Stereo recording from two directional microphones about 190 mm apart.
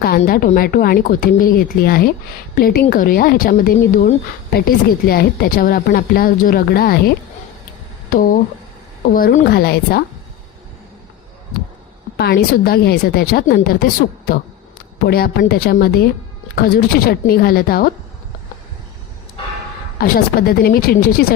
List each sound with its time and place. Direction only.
0.3 s a woman's voice: 50° left (ahead or behind)
8.1 s a woman's voice: 45° left (ahead or behind)
12.1 s a woman's voice: 55° left (ahead or behind)
20.0 s a woman's voice: 50° left (ahead or behind)